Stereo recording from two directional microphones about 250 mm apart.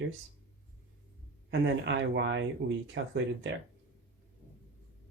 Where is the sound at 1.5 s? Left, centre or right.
Right.